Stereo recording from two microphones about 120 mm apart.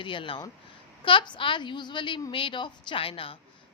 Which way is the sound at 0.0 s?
45° left (ahead or behind).